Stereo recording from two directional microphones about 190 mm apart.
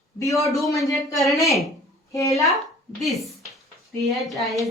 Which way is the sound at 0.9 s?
Centre (ahead or behind).